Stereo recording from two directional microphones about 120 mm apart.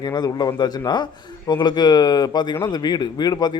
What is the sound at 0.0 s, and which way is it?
Speech, 35° left (ahead or behind).